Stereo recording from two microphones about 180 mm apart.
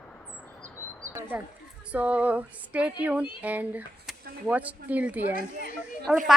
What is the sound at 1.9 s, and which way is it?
Speech, 10° right (ahead or behind).